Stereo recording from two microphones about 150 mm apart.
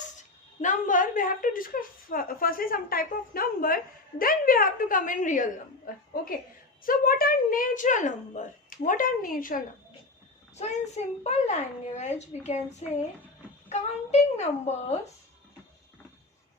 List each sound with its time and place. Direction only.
0.2 s speech: 55° left (ahead or behind)
6.8 s speech: 75° left (ahead or behind)
10.6 s a child's voice: 50° left (ahead or behind)